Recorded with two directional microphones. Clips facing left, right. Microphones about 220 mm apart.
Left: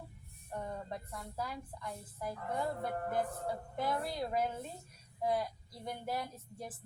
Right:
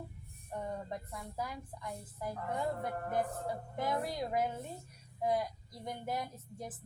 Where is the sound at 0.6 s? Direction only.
15° right (ahead or behind).